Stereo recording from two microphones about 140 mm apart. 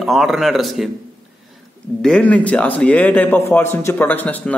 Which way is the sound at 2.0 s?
10° left (ahead or behind).